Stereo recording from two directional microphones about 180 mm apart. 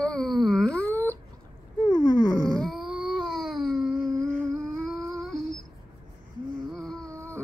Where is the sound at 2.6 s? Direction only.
Centre (ahead or behind).